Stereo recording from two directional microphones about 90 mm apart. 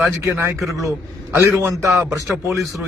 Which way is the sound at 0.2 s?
30° right (ahead or behind).